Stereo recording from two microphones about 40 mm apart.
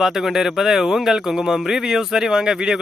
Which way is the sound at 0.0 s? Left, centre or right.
Centre.